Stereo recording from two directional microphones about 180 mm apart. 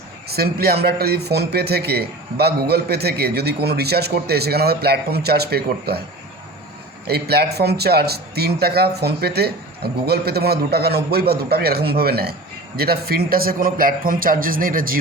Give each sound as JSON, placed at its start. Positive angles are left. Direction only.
{"t": 0.3, "sound": "a man's voice", "side_deg": -60}
{"t": 7.1, "sound": "a man's voice", "side_deg": -60}